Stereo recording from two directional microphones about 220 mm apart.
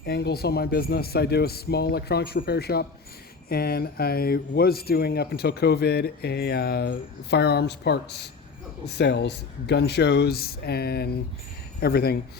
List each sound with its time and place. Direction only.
0.0 s speech: 45° left (ahead or behind)